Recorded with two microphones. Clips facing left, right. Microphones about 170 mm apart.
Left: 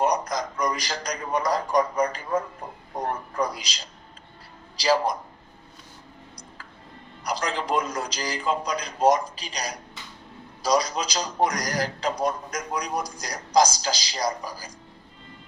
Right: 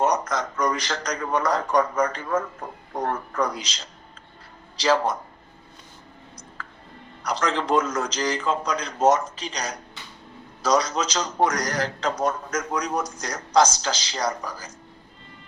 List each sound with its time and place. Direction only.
0.0 s a sound: 15° left (ahead or behind)
0.5 s speech: 15° left (ahead or behind)
4.8 s speech: 15° left (ahead or behind)
7.4 s speech: 10° left (ahead or behind)